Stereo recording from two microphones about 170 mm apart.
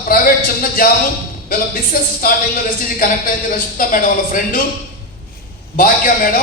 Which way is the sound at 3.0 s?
55° left (ahead or behind).